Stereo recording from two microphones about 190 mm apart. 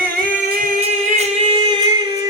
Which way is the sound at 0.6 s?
35° right (ahead or behind).